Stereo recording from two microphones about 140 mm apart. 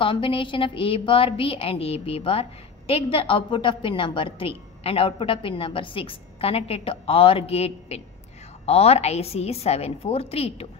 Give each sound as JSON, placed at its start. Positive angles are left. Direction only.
{"t": 0.0, "sound": "a woman's voice", "side_deg": 40}